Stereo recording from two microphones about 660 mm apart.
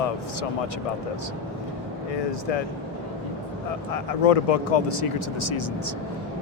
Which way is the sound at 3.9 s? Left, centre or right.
Left.